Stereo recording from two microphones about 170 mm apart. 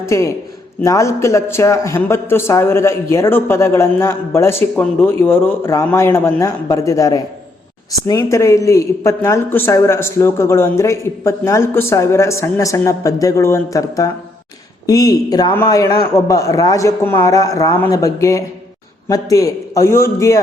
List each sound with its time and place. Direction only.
0.0 s a man's voice: 15° left (ahead or behind)